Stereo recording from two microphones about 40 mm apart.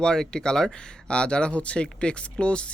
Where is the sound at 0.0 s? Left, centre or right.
Centre.